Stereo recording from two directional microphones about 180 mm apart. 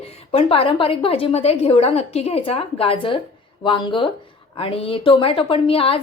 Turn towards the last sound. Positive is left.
turn(degrees=30)  # may be behind; listen again after turning